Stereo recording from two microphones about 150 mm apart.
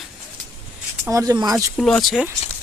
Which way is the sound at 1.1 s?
20° right (ahead or behind).